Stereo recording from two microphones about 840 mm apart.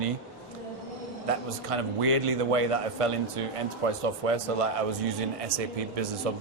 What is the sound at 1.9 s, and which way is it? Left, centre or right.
A man's voice, right.